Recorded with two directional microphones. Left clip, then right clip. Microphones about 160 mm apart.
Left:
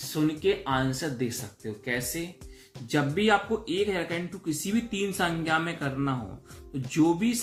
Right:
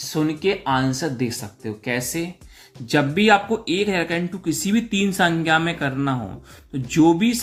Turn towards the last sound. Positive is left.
turn(degrees=-45)  # may be behind; listen again after turning